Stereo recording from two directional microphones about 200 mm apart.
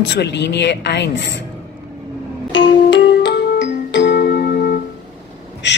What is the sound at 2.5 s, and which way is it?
Music, 65° left (ahead or behind).